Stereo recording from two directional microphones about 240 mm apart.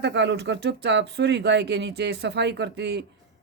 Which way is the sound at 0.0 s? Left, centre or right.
Right.